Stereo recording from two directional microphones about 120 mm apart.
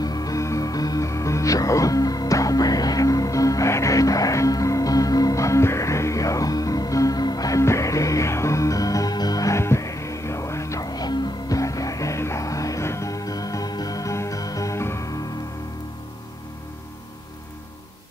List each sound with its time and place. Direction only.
0.0 s music: 30° left (ahead or behind)